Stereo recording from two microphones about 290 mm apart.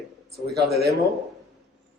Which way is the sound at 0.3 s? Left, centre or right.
Right.